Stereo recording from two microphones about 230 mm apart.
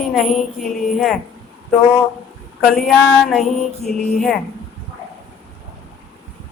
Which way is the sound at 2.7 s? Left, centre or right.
Centre.